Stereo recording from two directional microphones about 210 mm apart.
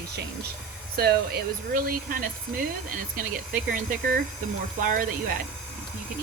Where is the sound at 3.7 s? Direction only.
45° right (ahead or behind).